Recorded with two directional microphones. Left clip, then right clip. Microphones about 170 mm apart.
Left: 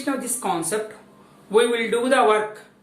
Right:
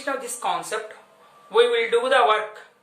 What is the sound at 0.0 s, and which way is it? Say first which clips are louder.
A woman's voice: even; 15° right (ahead or behind).